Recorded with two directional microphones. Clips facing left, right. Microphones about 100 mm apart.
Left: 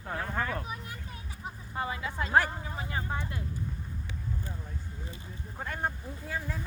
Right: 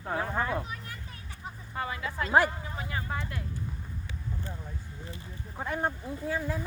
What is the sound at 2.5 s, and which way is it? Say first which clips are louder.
Vehicle: even; 25° left (ahead or behind).